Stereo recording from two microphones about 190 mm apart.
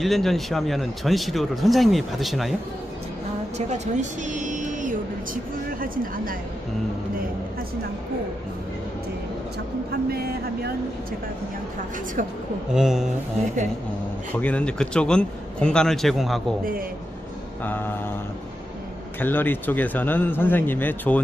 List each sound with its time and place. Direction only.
0.0 s speech: centre (ahead or behind)
3.5 s speech: 35° right (ahead or behind)
12.7 s speech: 5° right (ahead or behind)
14.3 s speech: 10° left (ahead or behind)
17.6 s speech: 10° left (ahead or behind)
19.1 s speech: 10° left (ahead or behind)